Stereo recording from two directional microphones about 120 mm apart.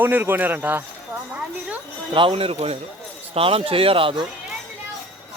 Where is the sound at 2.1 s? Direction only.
50° right (ahead or behind).